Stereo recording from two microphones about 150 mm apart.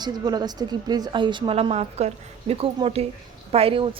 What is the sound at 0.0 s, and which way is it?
A woman's voice, 25° right (ahead or behind).